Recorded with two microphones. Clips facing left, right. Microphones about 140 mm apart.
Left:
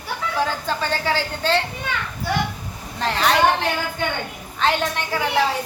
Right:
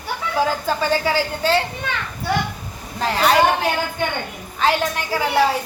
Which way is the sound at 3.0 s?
5° right (ahead or behind).